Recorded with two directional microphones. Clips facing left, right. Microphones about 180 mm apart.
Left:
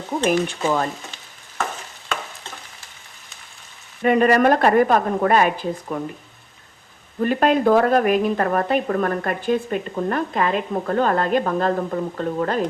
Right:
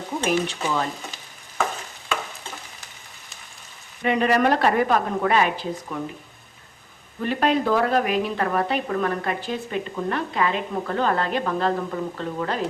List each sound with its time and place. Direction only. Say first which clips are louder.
0.2 s a woman's voice: left 4 dB; 50° left (ahead or behind)
4.0 s a woman's voice: left 4 dB; 50° left (ahead or behind)
7.2 s a woman's voice: left 4 dB; 45° left (ahead or behind)